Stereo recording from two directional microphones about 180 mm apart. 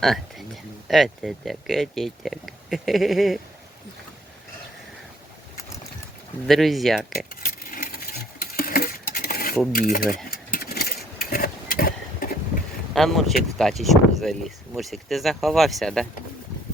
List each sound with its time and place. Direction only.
0.0 s speech: centre (ahead or behind)
6.5 s speech: centre (ahead or behind)
7.4 s coin: 50° left (ahead or behind)
9.7 s speech: 50° left (ahead or behind)
10.2 s vehicle: 60° left (ahead or behind)
12.9 s speech: centre (ahead or behind)